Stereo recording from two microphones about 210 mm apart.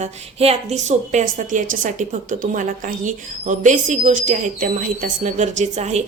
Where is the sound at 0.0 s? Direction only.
30° right (ahead or behind).